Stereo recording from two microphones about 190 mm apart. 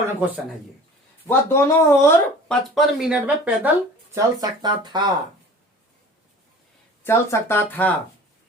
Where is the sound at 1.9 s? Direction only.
15° left (ahead or behind).